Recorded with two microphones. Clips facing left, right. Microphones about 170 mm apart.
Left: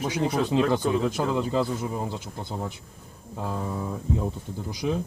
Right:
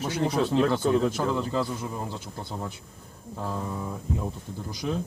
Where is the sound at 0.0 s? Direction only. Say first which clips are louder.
Even; 15° left (ahead or behind).